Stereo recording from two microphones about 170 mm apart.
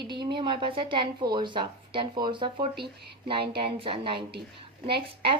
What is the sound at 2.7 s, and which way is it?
Speech, 70° right (ahead or behind).